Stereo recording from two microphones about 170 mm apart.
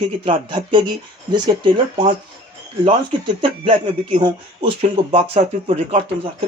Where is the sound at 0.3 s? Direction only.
30° right (ahead or behind).